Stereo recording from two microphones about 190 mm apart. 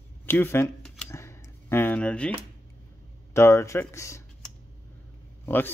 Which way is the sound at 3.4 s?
15° left (ahead or behind).